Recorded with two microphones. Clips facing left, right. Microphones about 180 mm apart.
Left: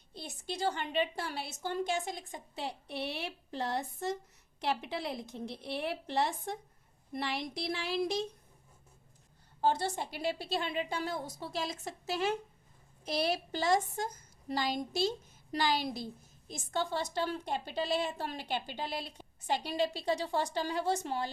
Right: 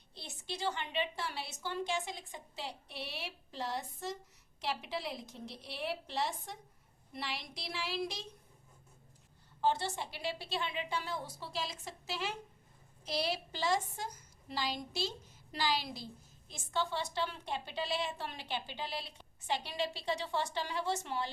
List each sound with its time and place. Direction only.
0.1 s a woman's voice: 45° left (ahead or behind)
9.6 s a woman's voice: 45° left (ahead or behind)